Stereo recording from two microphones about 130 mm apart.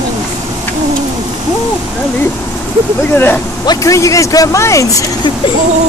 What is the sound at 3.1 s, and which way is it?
Speech, 15° left (ahead or behind).